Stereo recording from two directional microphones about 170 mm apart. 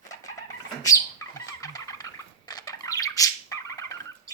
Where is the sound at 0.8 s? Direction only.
20° left (ahead or behind).